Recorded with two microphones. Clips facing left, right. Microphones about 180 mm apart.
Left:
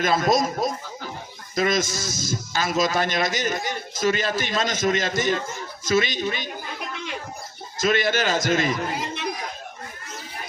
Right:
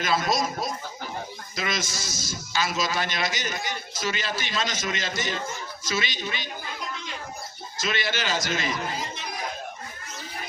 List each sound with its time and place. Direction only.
0.0 s a man's voice: 50° left (ahead or behind)
5.8 s a sound: 50° left (ahead or behind)
7.8 s a man's voice: 50° left (ahead or behind)